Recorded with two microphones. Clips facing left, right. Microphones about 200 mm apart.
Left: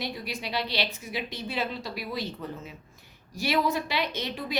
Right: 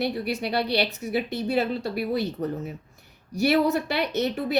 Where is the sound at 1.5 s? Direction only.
50° right (ahead or behind).